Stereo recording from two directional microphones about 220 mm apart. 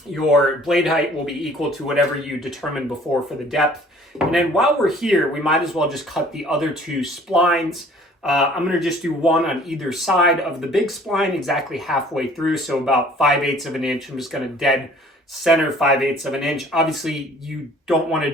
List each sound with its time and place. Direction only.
0.1 s speech: centre (ahead or behind)
4.3 s speech: centre (ahead or behind)